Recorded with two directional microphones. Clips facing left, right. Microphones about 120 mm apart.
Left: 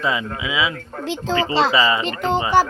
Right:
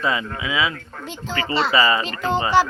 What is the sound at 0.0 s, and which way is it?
Speech, 20° left (ahead or behind).